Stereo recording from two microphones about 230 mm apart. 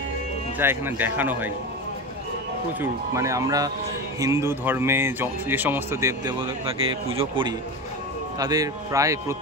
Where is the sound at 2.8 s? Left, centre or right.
Centre.